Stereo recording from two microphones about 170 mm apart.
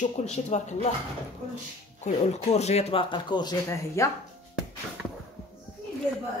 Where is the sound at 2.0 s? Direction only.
40° left (ahead or behind); by 4.1 s 20° left (ahead or behind).